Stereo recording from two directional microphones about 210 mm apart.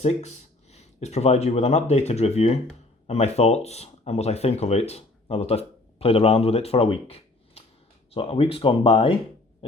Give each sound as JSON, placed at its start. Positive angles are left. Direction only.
{"t": 0.0, "sound": "speech", "side_deg": 30}